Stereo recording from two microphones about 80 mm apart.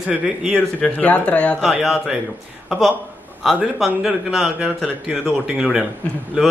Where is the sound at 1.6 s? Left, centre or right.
Centre.